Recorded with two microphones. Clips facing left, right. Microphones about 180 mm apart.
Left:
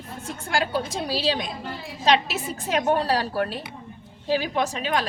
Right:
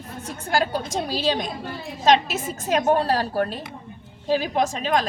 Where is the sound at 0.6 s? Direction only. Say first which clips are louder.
Right 1 dB; 45° right (ahead or behind).